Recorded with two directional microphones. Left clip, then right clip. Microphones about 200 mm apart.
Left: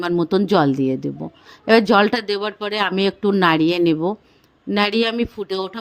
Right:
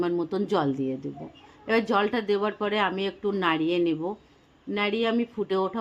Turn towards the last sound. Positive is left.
turn(degrees=45)  # may be behind; listen again after turning